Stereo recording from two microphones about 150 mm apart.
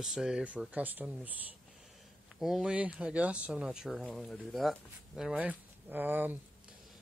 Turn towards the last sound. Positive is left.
turn(degrees=-10)  # may be behind; listen again after turning